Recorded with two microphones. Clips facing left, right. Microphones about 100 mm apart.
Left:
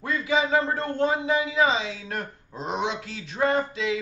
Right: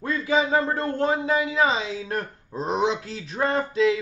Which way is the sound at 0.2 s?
35° right (ahead or behind).